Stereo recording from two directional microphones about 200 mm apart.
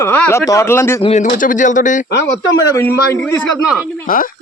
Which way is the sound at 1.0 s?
35° left (ahead or behind).